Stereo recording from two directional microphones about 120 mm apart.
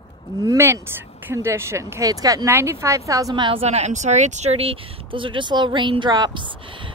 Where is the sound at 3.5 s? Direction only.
60° right (ahead or behind); by 6.4 s 35° right (ahead or behind).